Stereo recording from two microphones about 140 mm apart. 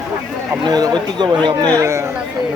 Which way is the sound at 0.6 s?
30° right (ahead or behind).